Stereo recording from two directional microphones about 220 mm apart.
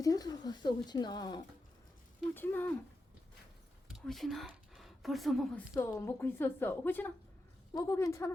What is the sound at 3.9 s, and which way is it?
Speech, centre (ahead or behind).